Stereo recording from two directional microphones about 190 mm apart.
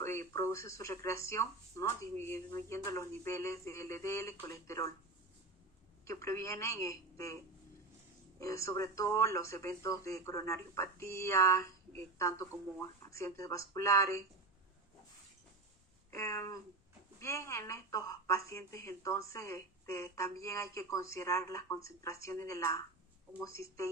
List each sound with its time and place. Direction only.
0.0 s speech: 15° left (ahead or behind)
6.1 s speech: 15° left (ahead or behind)
8.4 s speech: 15° left (ahead or behind)
16.1 s speech: 15° left (ahead or behind)